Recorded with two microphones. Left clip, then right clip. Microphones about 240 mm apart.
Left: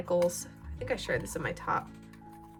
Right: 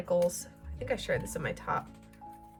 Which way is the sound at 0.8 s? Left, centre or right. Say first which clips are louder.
Even; centre.